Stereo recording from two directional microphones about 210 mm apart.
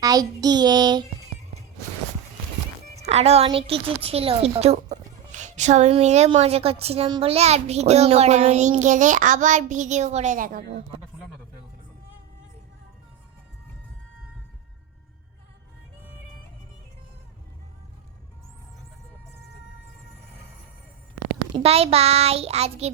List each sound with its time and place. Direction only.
0.0 s a child's voice: 15° right (ahead or behind)
2.9 s a woman's voice: 30° right (ahead or behind)
21.5 s a child's voice: 30° right (ahead or behind)